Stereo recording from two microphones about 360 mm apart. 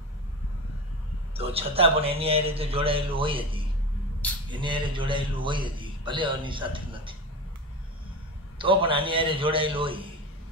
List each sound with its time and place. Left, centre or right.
1.3 s a man's voice: centre
8.5 s a man's voice: centre